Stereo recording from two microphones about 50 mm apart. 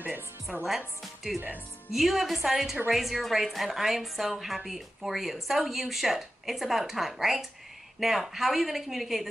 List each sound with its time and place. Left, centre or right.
0.0 s music: right
0.7 s a woman's voice: centre